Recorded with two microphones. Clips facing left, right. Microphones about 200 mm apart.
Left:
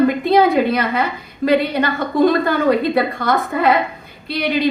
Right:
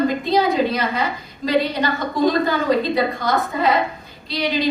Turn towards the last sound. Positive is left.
turn(degrees=60)  # may be behind; listen again after turning